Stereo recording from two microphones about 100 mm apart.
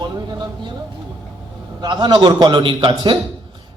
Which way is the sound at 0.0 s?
45° right (ahead or behind).